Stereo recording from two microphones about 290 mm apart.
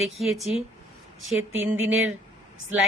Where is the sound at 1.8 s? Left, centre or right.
Right.